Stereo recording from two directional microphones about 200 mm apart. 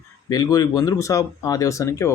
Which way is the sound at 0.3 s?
20° left (ahead or behind).